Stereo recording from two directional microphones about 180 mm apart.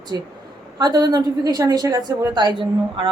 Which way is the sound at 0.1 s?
20° right (ahead or behind).